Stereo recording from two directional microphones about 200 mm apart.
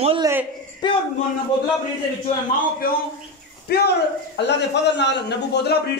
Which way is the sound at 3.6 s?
55° left (ahead or behind).